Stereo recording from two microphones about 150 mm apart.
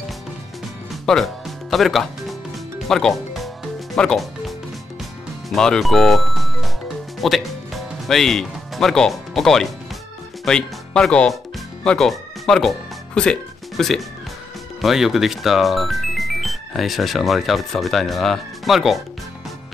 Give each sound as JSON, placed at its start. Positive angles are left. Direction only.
{"t": 1.0, "sound": "music", "side_deg": 0}
{"t": 5.5, "sound": "speech", "side_deg": 5}
{"t": 7.2, "sound": "music", "side_deg": 0}
{"t": 10.4, "sound": "speech", "side_deg": 5}
{"t": 11.8, "sound": "music", "side_deg": 5}
{"t": 14.8, "sound": "speech", "side_deg": 0}